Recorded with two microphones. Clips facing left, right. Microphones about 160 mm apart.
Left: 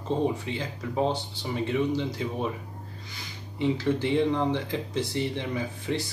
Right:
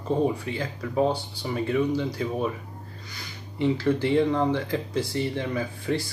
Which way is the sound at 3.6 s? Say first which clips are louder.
Right 2 dB; 20° left (ahead or behind).